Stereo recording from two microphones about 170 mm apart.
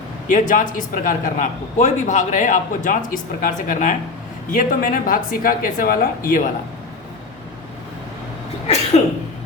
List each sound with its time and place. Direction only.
0.3 s a man's voice: 50° left (ahead or behind)
9.0 s a man's voice: 40° left (ahead or behind)